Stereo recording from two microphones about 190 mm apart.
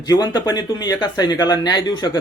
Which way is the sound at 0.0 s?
20° left (ahead or behind).